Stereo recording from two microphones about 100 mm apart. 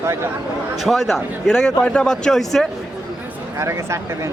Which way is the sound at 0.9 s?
Centre (ahead or behind).